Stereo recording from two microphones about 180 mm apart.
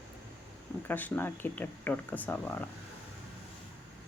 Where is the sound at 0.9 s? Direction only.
10° left (ahead or behind).